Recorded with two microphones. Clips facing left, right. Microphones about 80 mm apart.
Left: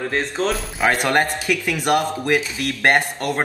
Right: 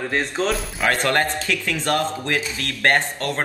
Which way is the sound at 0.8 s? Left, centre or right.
Centre.